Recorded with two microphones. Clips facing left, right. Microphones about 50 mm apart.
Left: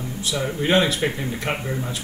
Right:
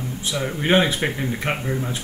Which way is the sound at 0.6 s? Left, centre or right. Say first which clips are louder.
Right 1 dB; right.